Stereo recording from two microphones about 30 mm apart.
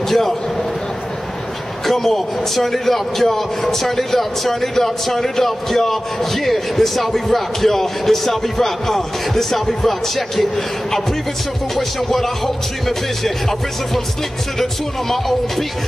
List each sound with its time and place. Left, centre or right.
0.1 s speech: centre
1.9 s speech: centre